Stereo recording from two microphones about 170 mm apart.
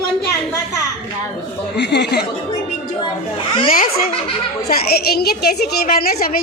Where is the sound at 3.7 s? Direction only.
60° left (ahead or behind).